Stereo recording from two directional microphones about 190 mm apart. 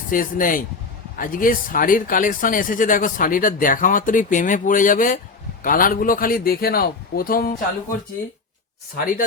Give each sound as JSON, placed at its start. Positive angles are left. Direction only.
{"t": 0.1, "sound": "speech", "side_deg": 45}